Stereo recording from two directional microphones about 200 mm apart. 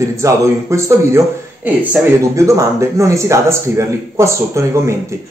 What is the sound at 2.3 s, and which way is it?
Speech, 15° right (ahead or behind).